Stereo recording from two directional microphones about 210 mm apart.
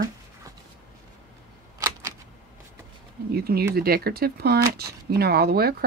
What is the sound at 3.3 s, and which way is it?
Speech, 50° right (ahead or behind).